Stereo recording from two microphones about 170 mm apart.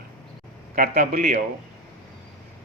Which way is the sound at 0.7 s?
55° right (ahead or behind).